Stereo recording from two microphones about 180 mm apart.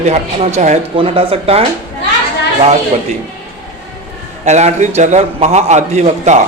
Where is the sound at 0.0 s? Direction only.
40° right (ahead or behind).